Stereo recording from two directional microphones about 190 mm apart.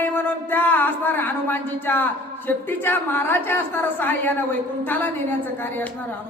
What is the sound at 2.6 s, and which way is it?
A woman's voice, 10° left (ahead or behind).